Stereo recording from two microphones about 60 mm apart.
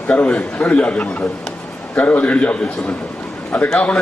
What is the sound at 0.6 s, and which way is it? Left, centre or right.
A man's voice, centre.